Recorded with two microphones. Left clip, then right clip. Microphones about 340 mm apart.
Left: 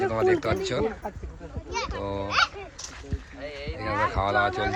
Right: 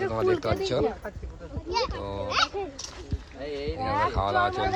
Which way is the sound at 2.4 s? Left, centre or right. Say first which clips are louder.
Left 2 dB; right.